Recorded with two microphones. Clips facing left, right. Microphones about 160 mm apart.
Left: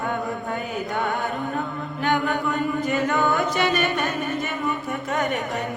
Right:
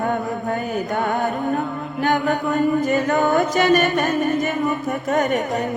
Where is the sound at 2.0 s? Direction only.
45° right (ahead or behind).